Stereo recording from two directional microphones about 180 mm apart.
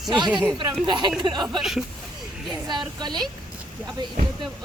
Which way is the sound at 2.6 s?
25° right (ahead or behind).